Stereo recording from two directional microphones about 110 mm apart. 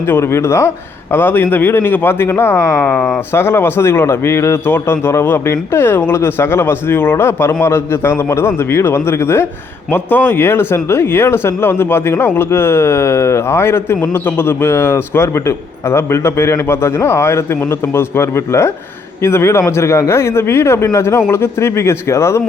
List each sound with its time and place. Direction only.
0.0 s speech: 25° left (ahead or behind)
2.8 s speech: 10° left (ahead or behind)
3.3 s speech: 20° left (ahead or behind)